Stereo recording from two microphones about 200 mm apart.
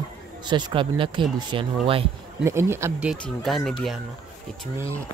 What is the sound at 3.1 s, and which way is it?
Speech, centre (ahead or behind).